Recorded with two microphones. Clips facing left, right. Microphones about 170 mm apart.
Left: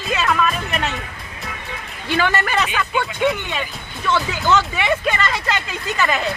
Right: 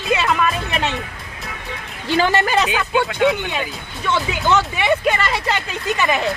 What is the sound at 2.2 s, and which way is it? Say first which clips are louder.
Speech: right 3 dB; 35° right (ahead or behind).